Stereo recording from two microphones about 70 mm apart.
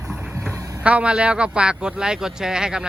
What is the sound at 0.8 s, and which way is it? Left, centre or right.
A man's voice, centre.